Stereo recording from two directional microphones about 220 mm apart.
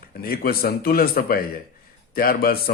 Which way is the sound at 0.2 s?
45° left (ahead or behind).